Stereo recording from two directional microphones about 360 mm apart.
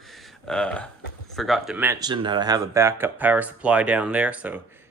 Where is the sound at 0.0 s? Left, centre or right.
Centre.